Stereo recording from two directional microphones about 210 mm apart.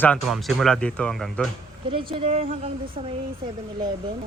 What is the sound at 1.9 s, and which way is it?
A woman's voice, 25° right (ahead or behind).